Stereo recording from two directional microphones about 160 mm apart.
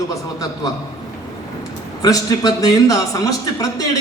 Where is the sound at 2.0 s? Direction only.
25° left (ahead or behind).